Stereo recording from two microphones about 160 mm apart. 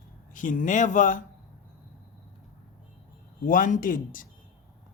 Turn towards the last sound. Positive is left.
turn(degrees=55)  # may be behind; listen again after turning